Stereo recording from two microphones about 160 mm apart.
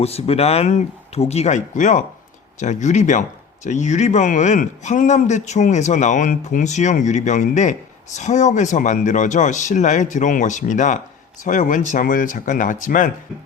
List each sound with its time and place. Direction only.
0.0 s speech: 40° left (ahead or behind); by 13.1 s 55° left (ahead or behind)